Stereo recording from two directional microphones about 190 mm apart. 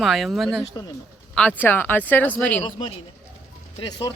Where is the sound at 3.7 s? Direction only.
20° left (ahead or behind).